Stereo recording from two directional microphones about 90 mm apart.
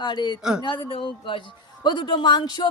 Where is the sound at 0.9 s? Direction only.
70° left (ahead or behind); by 2.7 s 55° left (ahead or behind).